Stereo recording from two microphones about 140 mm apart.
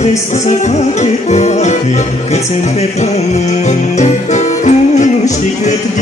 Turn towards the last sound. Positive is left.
turn(degrees=55)  # may be behind; listen again after turning